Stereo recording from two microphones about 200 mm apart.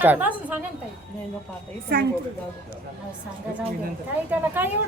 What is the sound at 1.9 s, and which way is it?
Speech, 50° right (ahead or behind).